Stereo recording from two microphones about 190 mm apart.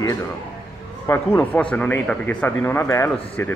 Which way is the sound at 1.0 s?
10° left (ahead or behind).